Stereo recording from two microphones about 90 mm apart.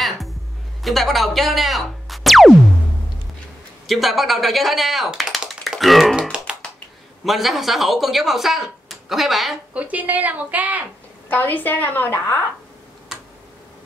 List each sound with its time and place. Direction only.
0.8 s speech: centre (ahead or behind)
3.8 s speech: centre (ahead or behind)
6.5 s finger snapping: 10° right (ahead or behind)
7.2 s speech: centre (ahead or behind)
9.8 s a woman's voice: 15° right (ahead or behind)
11.2 s a woman's voice: 20° left (ahead or behind)